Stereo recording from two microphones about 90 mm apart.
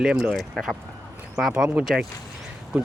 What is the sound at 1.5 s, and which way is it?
Speech, 15° right (ahead or behind).